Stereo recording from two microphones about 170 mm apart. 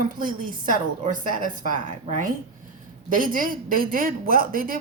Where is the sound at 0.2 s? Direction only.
55° right (ahead or behind).